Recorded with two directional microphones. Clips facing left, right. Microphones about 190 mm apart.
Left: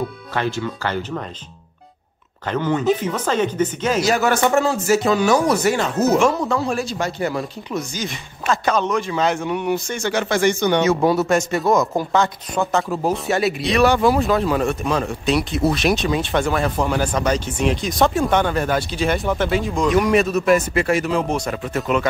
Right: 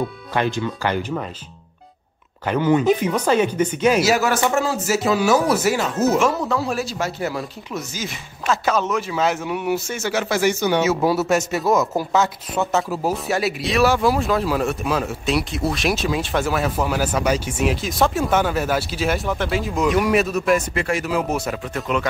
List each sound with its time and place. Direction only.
0.3 s speech: 15° right (ahead or behind)
2.4 s speech: 10° right (ahead or behind)